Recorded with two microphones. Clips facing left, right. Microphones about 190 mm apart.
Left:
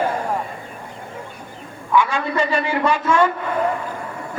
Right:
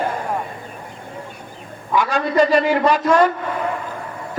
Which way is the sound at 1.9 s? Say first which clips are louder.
Right 2 dB; 40° right (ahead or behind).